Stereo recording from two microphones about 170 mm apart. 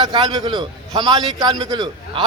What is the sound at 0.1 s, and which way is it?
A man's voice, 25° right (ahead or behind).